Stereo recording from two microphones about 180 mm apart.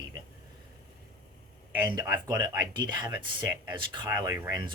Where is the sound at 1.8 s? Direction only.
20° right (ahead or behind).